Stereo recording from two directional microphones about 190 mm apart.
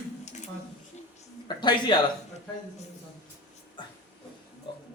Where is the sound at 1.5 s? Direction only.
25° left (ahead or behind).